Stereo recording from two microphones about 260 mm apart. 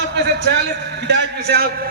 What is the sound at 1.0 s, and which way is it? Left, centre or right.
Speech, right.